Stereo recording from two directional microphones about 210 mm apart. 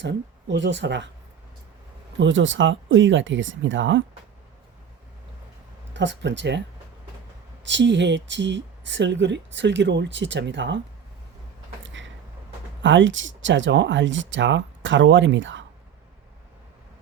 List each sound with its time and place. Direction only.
0.0 s speech: 60° right (ahead or behind)
2.1 s speech: 60° right (ahead or behind)
5.9 s speech: 60° right (ahead or behind)
7.6 s speech: 60° right (ahead or behind)
11.8 s a sound: 60° right (ahead or behind)
12.8 s speech: 60° right (ahead or behind)